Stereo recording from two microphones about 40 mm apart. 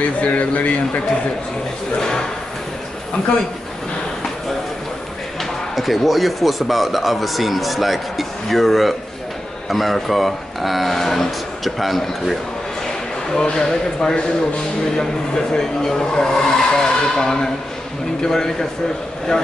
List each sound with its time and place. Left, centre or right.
0.0 s speech: left
2.0 s speech: centre
5.4 s speech: centre
13.3 s speech: centre